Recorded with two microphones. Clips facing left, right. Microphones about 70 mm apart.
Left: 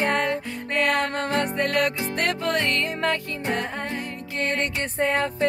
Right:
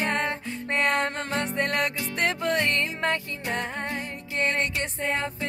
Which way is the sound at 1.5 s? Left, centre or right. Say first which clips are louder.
Left 3 dB; right.